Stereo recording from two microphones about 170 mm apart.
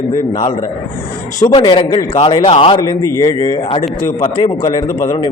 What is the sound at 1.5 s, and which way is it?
A man's voice, 25° left (ahead or behind).